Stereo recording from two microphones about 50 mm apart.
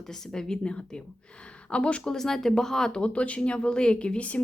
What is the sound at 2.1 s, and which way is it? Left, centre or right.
Speech, centre.